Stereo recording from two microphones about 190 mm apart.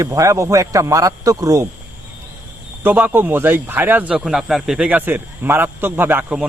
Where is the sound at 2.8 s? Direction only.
10° right (ahead or behind).